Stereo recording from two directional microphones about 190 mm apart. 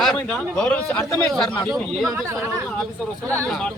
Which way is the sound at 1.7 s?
Centre (ahead or behind).